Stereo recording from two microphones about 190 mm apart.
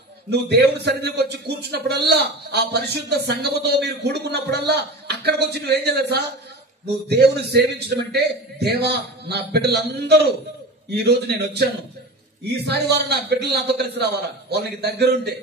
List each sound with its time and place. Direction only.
0.3 s a man's voice: 60° right (ahead or behind)